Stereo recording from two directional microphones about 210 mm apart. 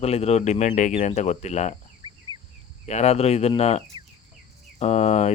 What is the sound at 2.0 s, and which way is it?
Chicken, 20° right (ahead or behind).